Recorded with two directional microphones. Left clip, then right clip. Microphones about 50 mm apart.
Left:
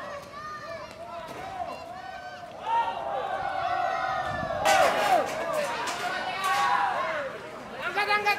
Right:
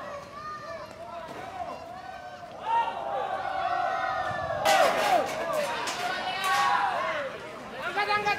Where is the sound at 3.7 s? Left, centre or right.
Centre.